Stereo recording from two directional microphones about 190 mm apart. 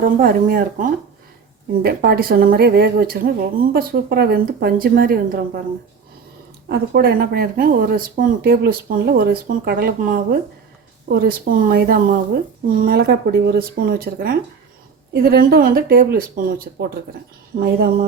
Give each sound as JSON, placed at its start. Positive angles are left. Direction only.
{"t": 0.0, "sound": "speech", "side_deg": -50}
{"t": 6.7, "sound": "a woman's voice", "side_deg": -55}